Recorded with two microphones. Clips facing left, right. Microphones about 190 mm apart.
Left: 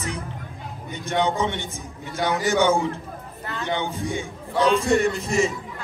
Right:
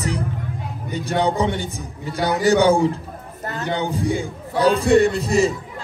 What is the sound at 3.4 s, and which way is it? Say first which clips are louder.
Music: right 3 dB; 40° right (ahead or behind).